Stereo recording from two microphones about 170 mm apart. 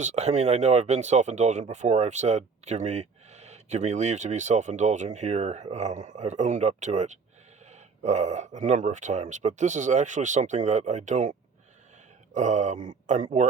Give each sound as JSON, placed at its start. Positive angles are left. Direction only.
{"t": 0.0, "sound": "speech", "side_deg": -40}